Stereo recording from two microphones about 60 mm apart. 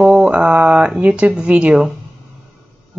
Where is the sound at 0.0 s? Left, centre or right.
Centre.